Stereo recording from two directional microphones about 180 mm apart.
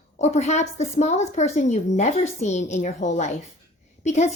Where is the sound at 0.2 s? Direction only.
40° left (ahead or behind).